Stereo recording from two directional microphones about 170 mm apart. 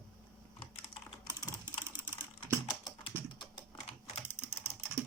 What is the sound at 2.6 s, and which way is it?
Typing, 20° left (ahead or behind).